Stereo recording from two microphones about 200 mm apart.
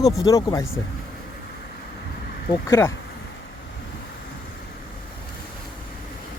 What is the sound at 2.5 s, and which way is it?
Speech, 15° left (ahead or behind).